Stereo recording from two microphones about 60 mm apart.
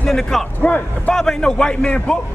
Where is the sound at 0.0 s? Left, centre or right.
Centre.